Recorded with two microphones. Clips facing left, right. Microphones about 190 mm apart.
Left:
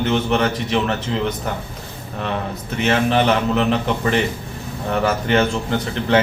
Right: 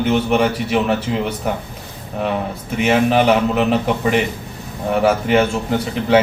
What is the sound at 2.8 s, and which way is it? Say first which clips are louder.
A man's voice: right 3 dB; 10° right (ahead or behind).